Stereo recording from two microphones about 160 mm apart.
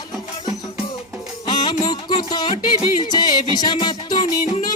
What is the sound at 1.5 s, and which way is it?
Music, 25° left (ahead or behind).